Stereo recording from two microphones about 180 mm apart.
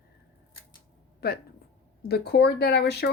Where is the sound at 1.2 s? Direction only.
60° left (ahead or behind).